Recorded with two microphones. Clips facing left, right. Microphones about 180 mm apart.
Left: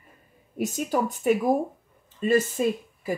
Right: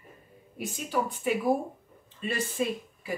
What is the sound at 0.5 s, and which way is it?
Speech, 45° left (ahead or behind).